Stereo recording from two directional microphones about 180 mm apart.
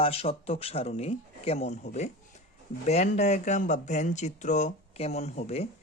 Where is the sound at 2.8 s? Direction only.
40° left (ahead or behind).